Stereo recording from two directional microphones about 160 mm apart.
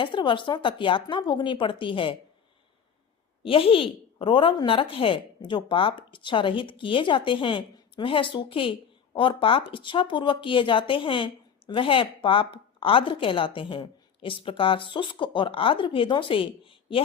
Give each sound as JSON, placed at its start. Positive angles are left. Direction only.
{"t": 0.0, "sound": "a woman's voice", "side_deg": 30}
{"t": 3.4, "sound": "a woman's voice", "side_deg": 35}